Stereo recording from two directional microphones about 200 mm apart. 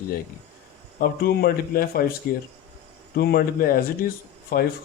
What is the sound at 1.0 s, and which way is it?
Speech, 50° left (ahead or behind).